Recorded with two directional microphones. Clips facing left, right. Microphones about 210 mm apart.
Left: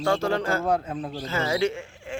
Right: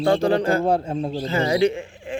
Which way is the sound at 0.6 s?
30° right (ahead or behind).